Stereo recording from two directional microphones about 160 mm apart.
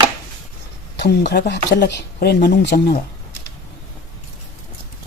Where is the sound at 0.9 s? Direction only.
90° left.